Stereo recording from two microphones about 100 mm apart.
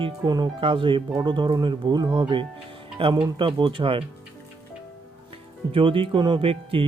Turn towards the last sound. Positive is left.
turn(degrees=-65)  # may be behind; listen again after turning